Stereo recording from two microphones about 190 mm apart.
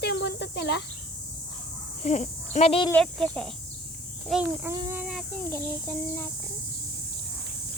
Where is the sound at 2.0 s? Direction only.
35° left (ahead or behind).